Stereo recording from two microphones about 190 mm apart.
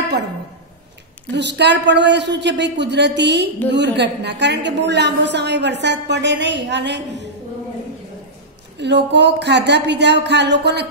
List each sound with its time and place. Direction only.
1.3 s a woman's voice: 65° right (ahead or behind)
8.7 s a woman's voice: 65° right (ahead or behind)